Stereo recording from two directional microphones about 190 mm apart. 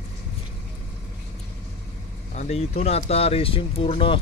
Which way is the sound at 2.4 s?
35° left (ahead or behind).